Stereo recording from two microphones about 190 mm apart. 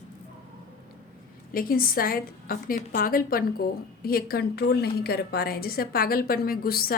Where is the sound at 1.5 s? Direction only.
50° left (ahead or behind).